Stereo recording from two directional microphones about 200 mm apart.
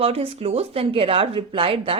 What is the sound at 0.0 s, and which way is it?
Speech, 30° right (ahead or behind).